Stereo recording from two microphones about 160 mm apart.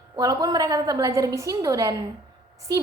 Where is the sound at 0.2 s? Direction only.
25° right (ahead or behind).